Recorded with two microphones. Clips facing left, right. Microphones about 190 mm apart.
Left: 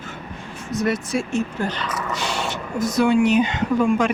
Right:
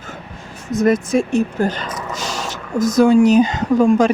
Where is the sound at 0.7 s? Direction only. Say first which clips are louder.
Right 6 dB; 20° right (ahead or behind).